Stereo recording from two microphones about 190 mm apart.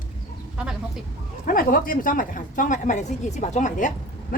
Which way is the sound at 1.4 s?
50° left (ahead or behind).